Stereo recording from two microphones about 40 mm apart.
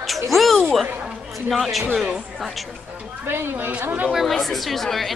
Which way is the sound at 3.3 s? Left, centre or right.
Right.